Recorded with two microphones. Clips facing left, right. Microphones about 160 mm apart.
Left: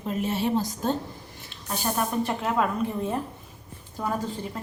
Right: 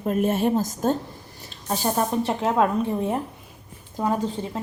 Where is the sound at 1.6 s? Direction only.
35° right (ahead or behind); by 4.5 s 20° right (ahead or behind).